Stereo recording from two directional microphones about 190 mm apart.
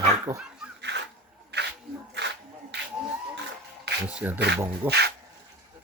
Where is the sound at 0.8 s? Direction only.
65° right (ahead or behind).